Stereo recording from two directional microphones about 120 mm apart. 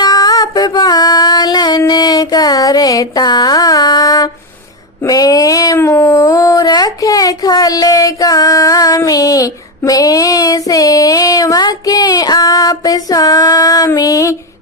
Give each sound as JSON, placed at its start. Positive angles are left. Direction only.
{"t": 0.0, "sound": "female singing", "side_deg": 30}
{"t": 1.8, "sound": "mantra", "side_deg": 35}
{"t": 5.0, "sound": "a sound", "side_deg": 30}